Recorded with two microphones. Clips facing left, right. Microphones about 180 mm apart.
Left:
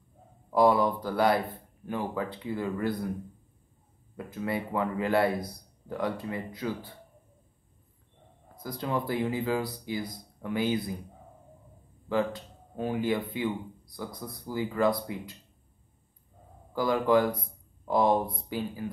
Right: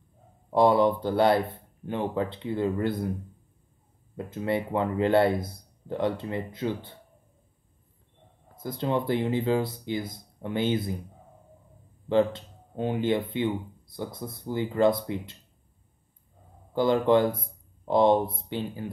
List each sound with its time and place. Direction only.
0.5 s speech: 25° right (ahead or behind)
4.3 s speech: 25° right (ahead or behind)
8.5 s speech: 25° right (ahead or behind)
12.1 s speech: 25° right (ahead or behind)
16.7 s speech: 25° right (ahead or behind)